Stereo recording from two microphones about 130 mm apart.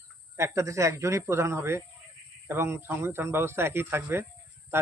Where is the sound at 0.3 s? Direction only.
20° right (ahead or behind).